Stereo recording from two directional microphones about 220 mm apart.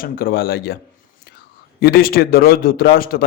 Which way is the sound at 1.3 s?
50° left (ahead or behind).